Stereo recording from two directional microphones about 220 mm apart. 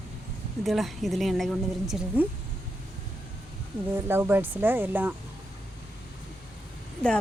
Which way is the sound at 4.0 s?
10° right (ahead or behind).